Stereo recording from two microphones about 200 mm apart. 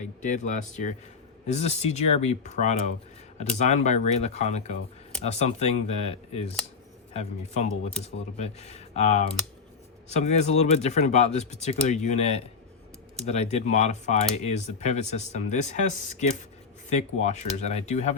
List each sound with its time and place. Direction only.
0.2 s speech: 40° left (ahead or behind)
16.9 s speech: 35° left (ahead or behind)